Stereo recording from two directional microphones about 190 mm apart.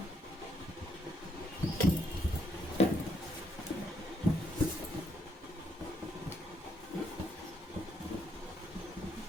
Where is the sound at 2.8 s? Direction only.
35° left (ahead or behind).